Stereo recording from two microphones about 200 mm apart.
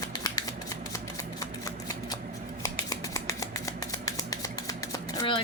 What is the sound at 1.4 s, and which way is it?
Shuffling cards, 20° left (ahead or behind).